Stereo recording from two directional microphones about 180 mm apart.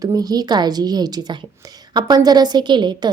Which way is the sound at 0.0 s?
20° right (ahead or behind).